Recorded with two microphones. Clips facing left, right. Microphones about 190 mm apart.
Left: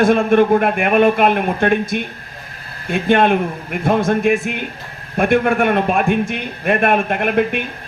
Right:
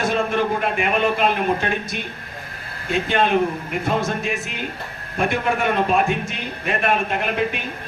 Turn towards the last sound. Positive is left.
turn(degrees=55)  # may be behind; listen again after turning